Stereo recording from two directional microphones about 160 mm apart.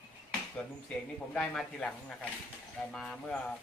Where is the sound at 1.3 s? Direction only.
5° left (ahead or behind).